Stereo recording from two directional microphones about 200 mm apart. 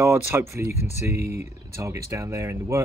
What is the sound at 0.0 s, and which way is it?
Speech, 15° right (ahead or behind).